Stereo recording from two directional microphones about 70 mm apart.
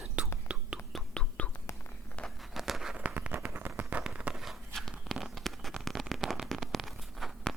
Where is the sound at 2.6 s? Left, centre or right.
Centre.